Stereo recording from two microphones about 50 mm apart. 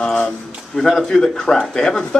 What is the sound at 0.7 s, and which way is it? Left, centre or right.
Speech, centre.